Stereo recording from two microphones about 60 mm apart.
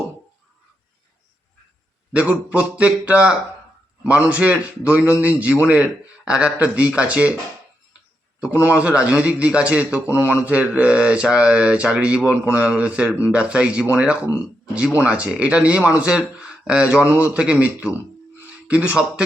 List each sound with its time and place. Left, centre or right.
2.1 s speech: centre
8.7 s speech: right